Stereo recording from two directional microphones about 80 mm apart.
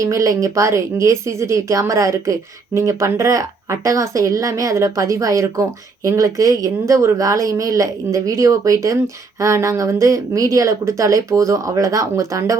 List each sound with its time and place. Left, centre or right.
0.0 s speech: right